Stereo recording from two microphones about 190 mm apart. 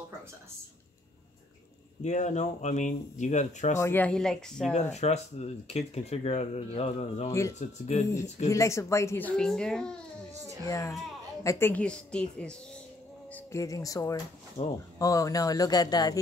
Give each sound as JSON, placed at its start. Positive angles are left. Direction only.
{"t": 2.0, "sound": "speech", "side_deg": 40}
{"t": 3.8, "sound": "a woman's voice", "side_deg": 10}
{"t": 4.9, "sound": "speech", "side_deg": 35}
{"t": 8.5, "sound": "a child's voice", "side_deg": 15}
{"t": 10.6, "sound": "a child's voice", "side_deg": 15}
{"t": 13.3, "sound": "speech", "side_deg": 15}
{"t": 14.6, "sound": "speech", "side_deg": 35}
{"t": 15.0, "sound": "speech", "side_deg": 15}